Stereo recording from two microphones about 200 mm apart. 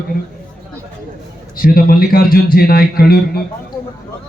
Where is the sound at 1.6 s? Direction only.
45° left (ahead or behind).